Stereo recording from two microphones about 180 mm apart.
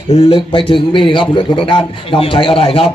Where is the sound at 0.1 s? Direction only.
35° left (ahead or behind).